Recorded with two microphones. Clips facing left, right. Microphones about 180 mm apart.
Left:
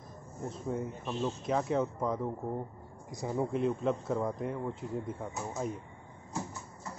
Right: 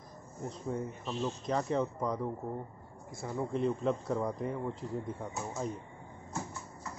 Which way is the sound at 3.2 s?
15° left (ahead or behind).